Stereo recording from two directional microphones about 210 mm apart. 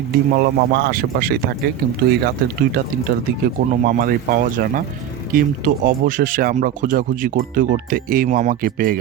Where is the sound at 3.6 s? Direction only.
40° right (ahead or behind).